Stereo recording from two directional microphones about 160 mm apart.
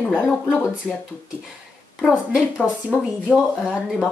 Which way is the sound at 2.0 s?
5° right (ahead or behind).